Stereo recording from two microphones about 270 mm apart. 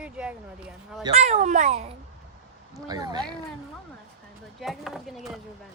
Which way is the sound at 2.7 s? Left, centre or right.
Centre.